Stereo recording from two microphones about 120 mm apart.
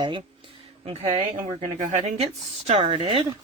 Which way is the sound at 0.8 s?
50° right (ahead or behind).